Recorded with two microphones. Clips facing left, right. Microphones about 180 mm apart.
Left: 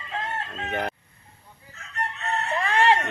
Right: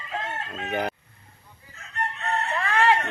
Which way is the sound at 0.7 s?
Centre (ahead or behind).